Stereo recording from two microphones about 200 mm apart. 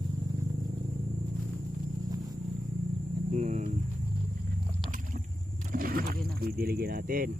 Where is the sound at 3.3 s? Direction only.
35° right (ahead or behind).